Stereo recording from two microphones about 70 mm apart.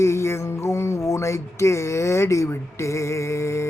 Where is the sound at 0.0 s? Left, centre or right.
Left.